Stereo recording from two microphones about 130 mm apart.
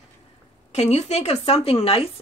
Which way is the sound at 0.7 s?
55° left (ahead or behind).